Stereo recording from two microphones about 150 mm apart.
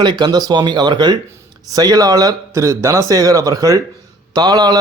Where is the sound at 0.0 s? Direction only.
30° right (ahead or behind).